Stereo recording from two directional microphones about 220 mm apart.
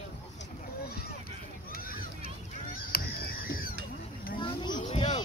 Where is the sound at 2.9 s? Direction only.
40° left (ahead or behind).